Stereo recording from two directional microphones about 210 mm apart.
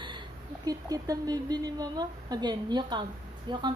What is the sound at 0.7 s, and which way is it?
A woman's voice, 15° right (ahead or behind).